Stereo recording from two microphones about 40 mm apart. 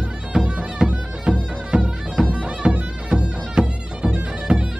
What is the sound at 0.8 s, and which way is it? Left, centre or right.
Music, right.